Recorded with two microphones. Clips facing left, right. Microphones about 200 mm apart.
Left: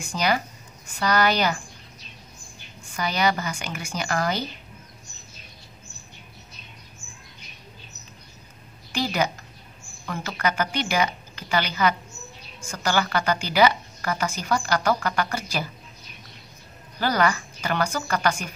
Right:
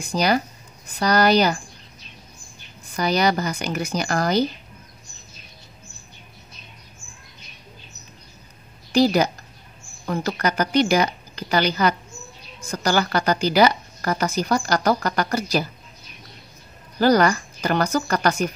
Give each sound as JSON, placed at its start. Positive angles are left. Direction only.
{"t": 0.0, "sound": "a woman's voice", "side_deg": -35}
{"t": 3.0, "sound": "a woman's voice", "side_deg": -40}
{"t": 8.9, "sound": "a woman's voice", "side_deg": -35}
{"t": 17.0, "sound": "a woman's voice", "side_deg": -40}